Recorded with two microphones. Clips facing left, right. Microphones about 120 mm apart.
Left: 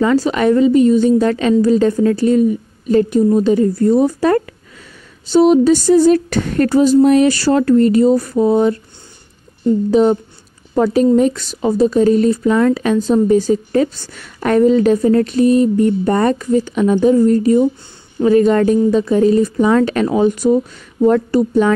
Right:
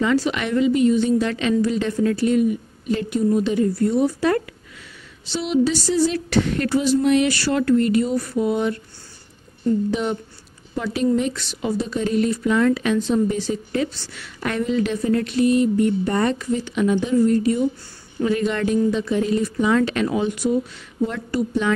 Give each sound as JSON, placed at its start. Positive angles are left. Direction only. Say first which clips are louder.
{"t": 0.0, "sound": "a woman's voice", "louder": "left 7 dB", "side_deg": 40}
{"t": 9.8, "sound": "a woman's voice", "louder": "left 11 dB", "side_deg": 35}